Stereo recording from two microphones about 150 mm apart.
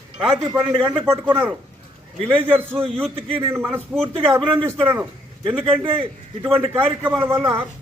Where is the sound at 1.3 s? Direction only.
15° right (ahead or behind).